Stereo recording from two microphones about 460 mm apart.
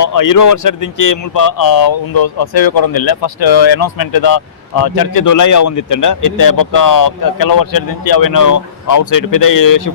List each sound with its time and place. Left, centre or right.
0.0 s speech: left